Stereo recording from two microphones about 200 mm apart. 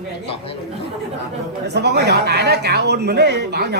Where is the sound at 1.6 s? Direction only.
55° right (ahead or behind).